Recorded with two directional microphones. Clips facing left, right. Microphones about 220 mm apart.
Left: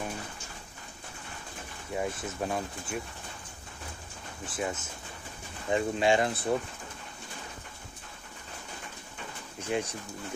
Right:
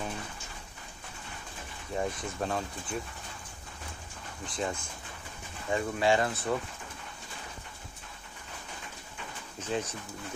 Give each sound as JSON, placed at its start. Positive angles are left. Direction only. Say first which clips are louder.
{"t": 2.0, "sound": "speech", "louder": "even", "side_deg": 10}
{"t": 4.5, "sound": "speech", "louder": "even", "side_deg": 5}
{"t": 5.7, "sound": "speech", "louder": "left 2 dB", "side_deg": 20}
{"t": 9.6, "sound": "speech", "louder": "left 2 dB", "side_deg": 10}